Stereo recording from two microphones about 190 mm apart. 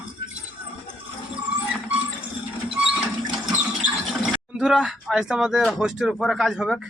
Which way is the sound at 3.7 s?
Centre (ahead or behind).